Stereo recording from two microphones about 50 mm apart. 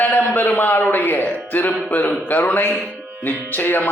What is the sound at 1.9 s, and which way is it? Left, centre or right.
Music, left.